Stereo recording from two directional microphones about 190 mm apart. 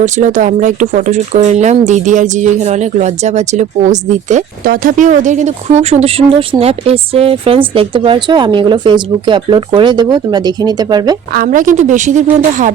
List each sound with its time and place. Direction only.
0.0 s speech: 40° right (ahead or behind); by 11.2 s 20° right (ahead or behind)
11.3 s speech: 45° right (ahead or behind)